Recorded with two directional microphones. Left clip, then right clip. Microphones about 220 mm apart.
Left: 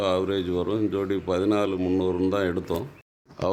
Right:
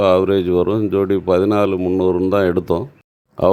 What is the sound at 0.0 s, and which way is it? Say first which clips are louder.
Speech: right 11 dB; 35° right (ahead or behind).